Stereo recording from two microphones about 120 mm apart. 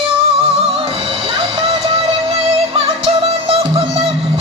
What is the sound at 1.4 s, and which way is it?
Music, 50° right (ahead or behind).